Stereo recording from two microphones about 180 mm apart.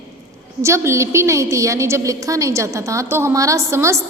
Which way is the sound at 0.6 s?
15° right (ahead or behind).